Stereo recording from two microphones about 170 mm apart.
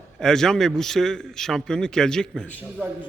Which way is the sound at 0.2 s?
5° left (ahead or behind).